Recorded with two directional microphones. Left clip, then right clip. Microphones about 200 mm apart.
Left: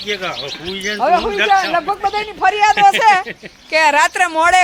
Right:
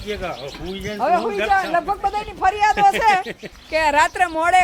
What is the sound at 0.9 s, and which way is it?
A man's voice, 45° left (ahead or behind).